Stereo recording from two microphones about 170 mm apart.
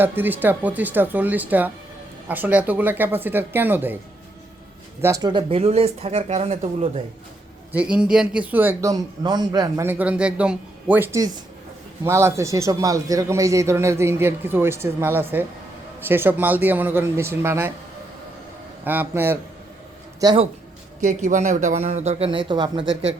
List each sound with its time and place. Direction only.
0.0 s speech: 10° right (ahead or behind)
5.0 s speech: 20° right (ahead or behind); by 7.0 s 35° right (ahead or behind)
7.7 s speech: 5° right (ahead or behind)
18.9 s speech: 10° right (ahead or behind)
21.0 s speech: 45° right (ahead or behind); by 22.9 s 25° right (ahead or behind)